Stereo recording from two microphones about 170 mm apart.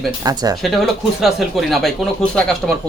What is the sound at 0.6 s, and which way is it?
Speech, centre (ahead or behind).